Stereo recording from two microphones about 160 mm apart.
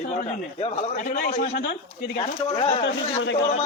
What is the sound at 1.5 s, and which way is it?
Speech, 85° left.